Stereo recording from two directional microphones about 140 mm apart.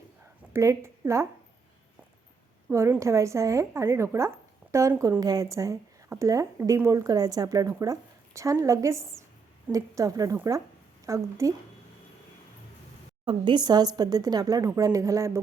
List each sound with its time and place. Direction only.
0.5 s a woman's voice: 20° right (ahead or behind)
2.6 s speech: 15° right (ahead or behind)
13.2 s speech: 35° right (ahead or behind)